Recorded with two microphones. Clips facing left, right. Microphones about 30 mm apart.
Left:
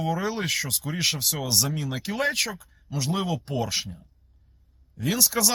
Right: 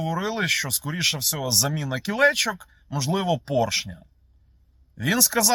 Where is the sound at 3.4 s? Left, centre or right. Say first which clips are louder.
Right 7 dB; right.